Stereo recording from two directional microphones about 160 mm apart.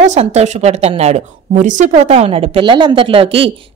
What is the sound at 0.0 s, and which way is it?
A woman's voice, 45° right (ahead or behind).